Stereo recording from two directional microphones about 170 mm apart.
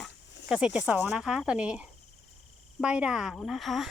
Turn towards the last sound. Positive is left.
turn(degrees=0)  # may be behind; listen again after turning